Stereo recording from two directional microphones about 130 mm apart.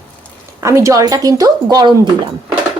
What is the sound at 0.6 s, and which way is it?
Speech, 20° right (ahead or behind).